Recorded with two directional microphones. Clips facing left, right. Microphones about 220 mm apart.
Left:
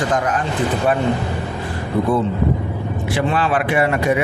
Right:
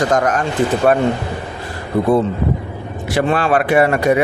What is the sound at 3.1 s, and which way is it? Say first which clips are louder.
Speech: right 4 dB; 45° right (ahead or behind).